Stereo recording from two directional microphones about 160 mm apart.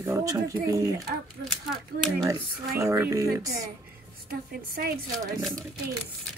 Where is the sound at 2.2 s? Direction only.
20° right (ahead or behind).